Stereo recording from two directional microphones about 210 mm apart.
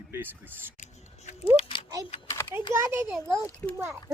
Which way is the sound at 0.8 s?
35° left (ahead or behind).